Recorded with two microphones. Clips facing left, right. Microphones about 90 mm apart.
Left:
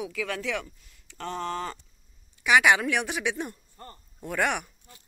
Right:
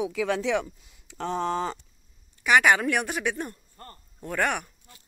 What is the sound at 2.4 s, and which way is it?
A woman's voice, centre (ahead or behind).